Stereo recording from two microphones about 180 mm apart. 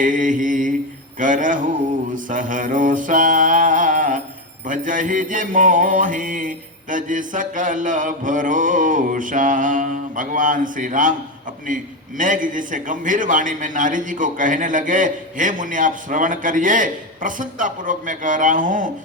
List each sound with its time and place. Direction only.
0.0 s mantra: 45° right (ahead or behind)
1.2 s a man's voice: 45° right (ahead or behind)
2.1 s mantra: 45° right (ahead or behind)
4.6 s a man's voice: 45° right (ahead or behind)